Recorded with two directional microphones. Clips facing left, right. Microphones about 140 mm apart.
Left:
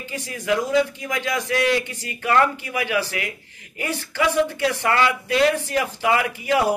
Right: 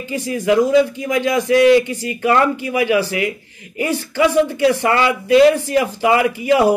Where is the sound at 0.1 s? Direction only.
15° right (ahead or behind).